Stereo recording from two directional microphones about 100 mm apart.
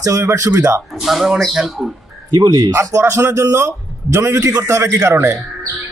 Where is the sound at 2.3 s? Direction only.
40° right (ahead or behind).